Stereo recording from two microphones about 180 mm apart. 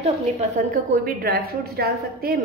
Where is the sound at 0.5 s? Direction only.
50° right (ahead or behind).